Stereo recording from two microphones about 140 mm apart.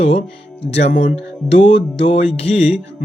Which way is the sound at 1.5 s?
45° left (ahead or behind).